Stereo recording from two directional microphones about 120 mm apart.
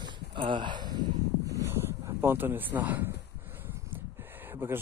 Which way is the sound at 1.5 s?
25° right (ahead or behind).